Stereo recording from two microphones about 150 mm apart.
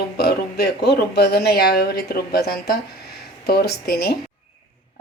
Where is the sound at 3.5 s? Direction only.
90° left.